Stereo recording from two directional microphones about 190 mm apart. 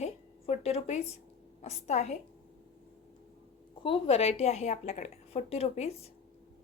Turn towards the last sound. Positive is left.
turn(degrees=35)  # may be behind; listen again after turning